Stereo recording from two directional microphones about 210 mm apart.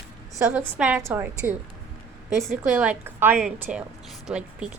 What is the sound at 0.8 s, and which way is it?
A woman's voice, 10° right (ahead or behind).